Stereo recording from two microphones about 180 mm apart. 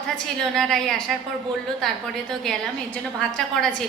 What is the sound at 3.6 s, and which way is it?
Speech, 5° left (ahead or behind).